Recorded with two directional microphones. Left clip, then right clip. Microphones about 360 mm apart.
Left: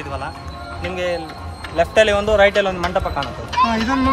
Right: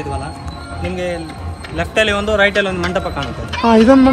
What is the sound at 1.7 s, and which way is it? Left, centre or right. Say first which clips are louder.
Speech: left 1 dB; left.